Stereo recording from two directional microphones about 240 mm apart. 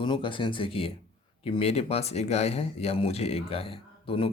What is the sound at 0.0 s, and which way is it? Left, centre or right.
Speech, centre.